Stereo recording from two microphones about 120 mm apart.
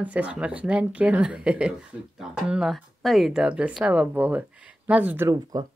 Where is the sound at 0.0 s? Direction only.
10° right (ahead or behind).